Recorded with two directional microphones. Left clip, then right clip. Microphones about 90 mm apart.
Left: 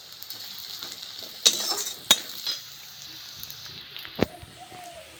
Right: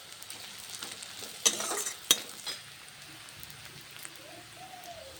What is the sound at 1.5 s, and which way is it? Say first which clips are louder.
Stir: left 6 dB; 15° right (ahead or behind).